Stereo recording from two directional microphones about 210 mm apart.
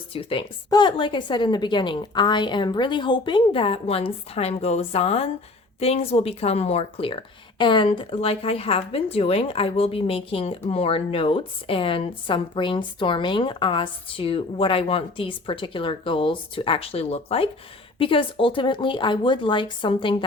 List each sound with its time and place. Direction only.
0.1 s speech: 25° left (ahead or behind)